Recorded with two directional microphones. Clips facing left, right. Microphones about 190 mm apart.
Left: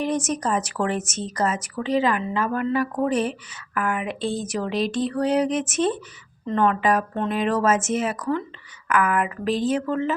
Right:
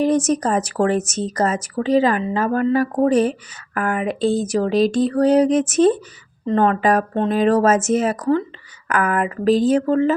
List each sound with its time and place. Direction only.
0.0 s speech: 35° right (ahead or behind)